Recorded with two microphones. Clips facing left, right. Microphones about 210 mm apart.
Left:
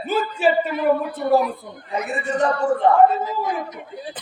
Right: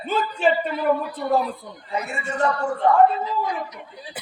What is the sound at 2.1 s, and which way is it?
Speech, 20° left (ahead or behind).